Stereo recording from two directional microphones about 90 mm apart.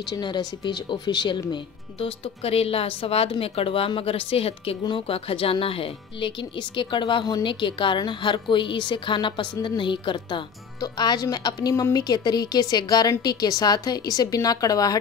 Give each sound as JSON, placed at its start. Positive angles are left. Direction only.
{"t": 0.1, "sound": "speech", "side_deg": 55}
{"t": 4.8, "sound": "speech", "side_deg": 80}
{"t": 6.8, "sound": "a woman's voice", "side_deg": 65}
{"t": 11.7, "sound": "a woman's voice", "side_deg": 35}
{"t": 12.0, "sound": "a woman's voice", "side_deg": 50}